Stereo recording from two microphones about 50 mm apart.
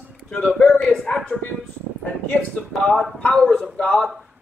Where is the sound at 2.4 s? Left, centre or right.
Left.